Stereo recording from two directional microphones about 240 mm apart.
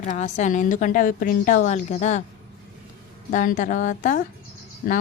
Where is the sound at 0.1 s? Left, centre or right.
Left.